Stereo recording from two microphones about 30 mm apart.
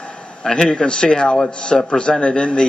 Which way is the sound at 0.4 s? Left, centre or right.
Left.